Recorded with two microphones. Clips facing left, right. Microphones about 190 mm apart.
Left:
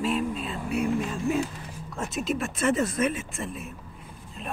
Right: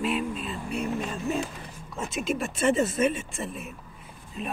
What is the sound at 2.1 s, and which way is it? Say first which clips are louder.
Speech: even; centre (ahead or behind).